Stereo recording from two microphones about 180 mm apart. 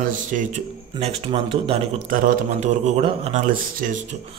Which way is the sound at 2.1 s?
50° right (ahead or behind).